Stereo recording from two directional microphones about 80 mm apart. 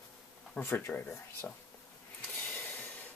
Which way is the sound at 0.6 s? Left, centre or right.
Left.